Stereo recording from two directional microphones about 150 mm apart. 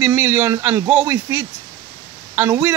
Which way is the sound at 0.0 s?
15° right (ahead or behind).